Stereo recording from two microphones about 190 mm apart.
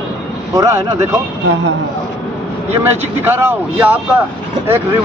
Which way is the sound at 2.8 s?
10° right (ahead or behind).